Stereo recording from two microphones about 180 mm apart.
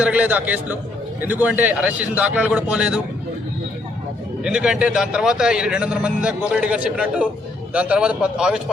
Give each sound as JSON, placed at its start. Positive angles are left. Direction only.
{"t": 0.0, "sound": "a man's voice", "side_deg": -5}
{"t": 4.4, "sound": "a man's voice", "side_deg": -5}